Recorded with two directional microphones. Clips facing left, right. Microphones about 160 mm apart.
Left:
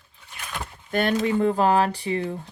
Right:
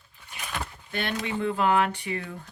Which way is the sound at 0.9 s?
45° left (ahead or behind).